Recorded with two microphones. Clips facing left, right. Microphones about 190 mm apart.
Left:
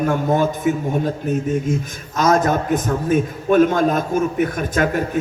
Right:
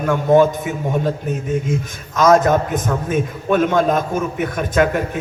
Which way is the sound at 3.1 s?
45° left (ahead or behind).